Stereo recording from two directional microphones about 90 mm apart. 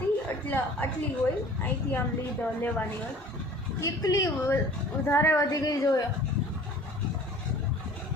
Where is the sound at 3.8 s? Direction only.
40° left (ahead or behind).